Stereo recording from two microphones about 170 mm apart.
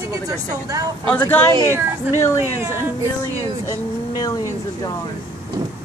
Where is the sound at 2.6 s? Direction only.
15° right (ahead or behind).